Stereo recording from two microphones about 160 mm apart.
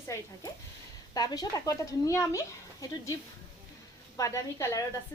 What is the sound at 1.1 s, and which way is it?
A woman's voice, 25° left (ahead or behind).